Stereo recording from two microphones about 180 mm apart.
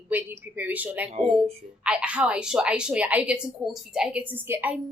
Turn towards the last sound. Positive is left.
turn(degrees=-10)  # may be behind; listen again after turning